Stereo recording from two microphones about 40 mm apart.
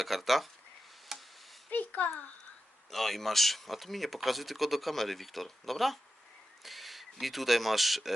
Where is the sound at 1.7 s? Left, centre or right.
Left.